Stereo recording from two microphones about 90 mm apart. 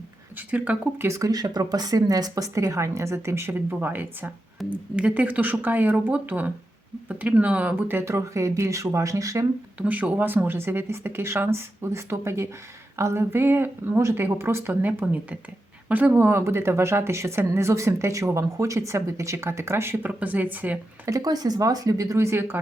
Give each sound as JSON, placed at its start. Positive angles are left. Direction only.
{"t": 0.3, "sound": "speech", "side_deg": -15}
{"t": 1.0, "sound": "speech", "side_deg": -35}
{"t": 9.7, "sound": "speech", "side_deg": -15}
{"t": 21.1, "sound": "speech", "side_deg": -45}